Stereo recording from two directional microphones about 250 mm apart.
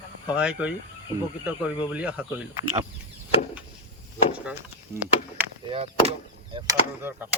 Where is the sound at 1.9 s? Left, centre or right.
Centre.